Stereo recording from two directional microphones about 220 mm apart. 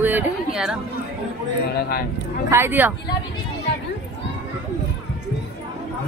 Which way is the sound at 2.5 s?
10° right (ahead or behind).